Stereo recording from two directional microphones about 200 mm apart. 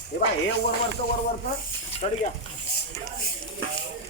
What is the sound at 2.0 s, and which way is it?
Speech, 30° left (ahead or behind).